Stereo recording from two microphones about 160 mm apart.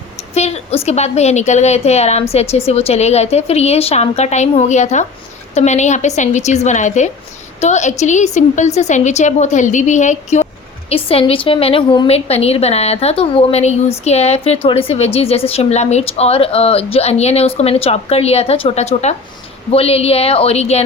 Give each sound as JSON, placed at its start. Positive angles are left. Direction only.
{"t": 0.3, "sound": "a woman's voice", "side_deg": 45}